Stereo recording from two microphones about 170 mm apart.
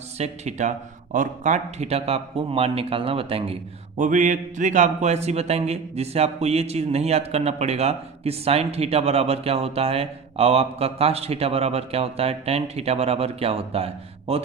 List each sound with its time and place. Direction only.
0.2 s a man's voice: 45° right (ahead or behind)